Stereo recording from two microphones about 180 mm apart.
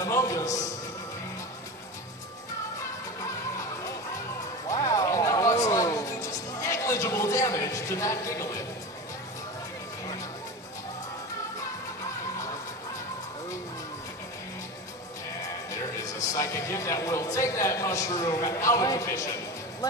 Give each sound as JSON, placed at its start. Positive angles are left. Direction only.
{"t": 0.0, "sound": "a sound", "side_deg": 15}
{"t": 3.2, "sound": "music", "side_deg": 15}
{"t": 15.7, "sound": "music", "side_deg": 15}